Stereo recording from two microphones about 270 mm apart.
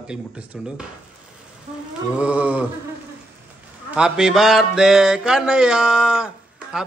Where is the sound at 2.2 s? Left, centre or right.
Centre.